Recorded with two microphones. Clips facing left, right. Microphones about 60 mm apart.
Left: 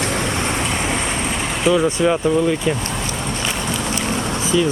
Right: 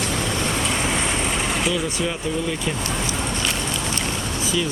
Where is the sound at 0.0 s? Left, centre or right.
Left.